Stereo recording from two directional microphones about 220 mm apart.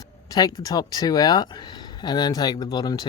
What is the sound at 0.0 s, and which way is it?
Speech, 15° left (ahead or behind).